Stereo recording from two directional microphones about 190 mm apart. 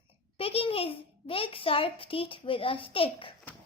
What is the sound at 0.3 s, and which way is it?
A child's voice, 30° left (ahead or behind).